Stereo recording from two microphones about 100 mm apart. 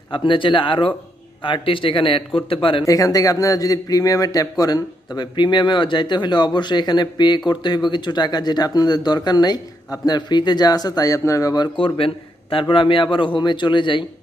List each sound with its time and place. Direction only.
0.1 s a man's voice: 55° left (ahead or behind)
2.8 s a man's voice: 35° left (ahead or behind)
11.7 s a man's voice: 65° left (ahead or behind)